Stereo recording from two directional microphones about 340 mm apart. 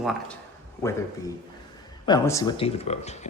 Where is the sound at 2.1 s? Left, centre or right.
Centre.